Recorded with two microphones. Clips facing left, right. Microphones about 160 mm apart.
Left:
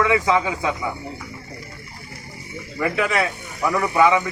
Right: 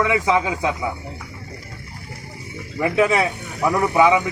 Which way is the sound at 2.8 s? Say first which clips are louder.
Right 4 dB; 15° right (ahead or behind).